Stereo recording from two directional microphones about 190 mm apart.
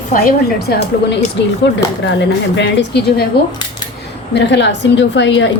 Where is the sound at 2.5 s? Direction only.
65° left (ahead or behind).